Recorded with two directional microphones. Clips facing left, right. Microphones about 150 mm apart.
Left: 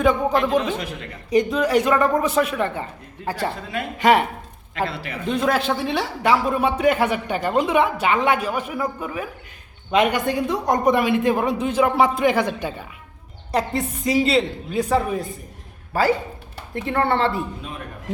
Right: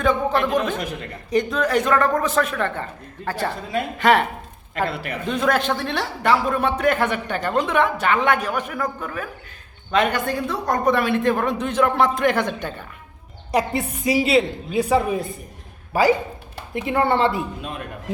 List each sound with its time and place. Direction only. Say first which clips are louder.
0.0 s speech: left 1 dB; 10° left (ahead or behind)
3.9 s speech: left 1 dB; 10° left (ahead or behind)
4.9 s speech: right 3 dB; 55° right (ahead or behind)
5.2 s speech: even; centre (ahead or behind)
13.5 s a woman's voice: right 1 dB; 10° right (ahead or behind)